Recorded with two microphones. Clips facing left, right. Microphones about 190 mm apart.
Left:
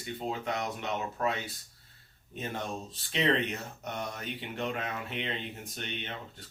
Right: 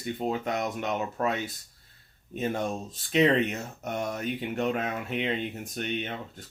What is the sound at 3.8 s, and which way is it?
Speech, 45° right (ahead or behind).